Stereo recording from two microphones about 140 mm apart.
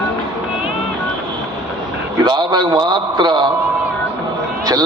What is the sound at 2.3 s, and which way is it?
A man's voice, 30° right (ahead or behind).